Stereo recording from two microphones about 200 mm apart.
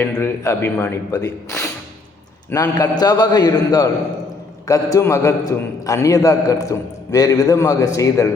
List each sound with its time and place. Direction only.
0.0 s a man's voice: 10° left (ahead or behind)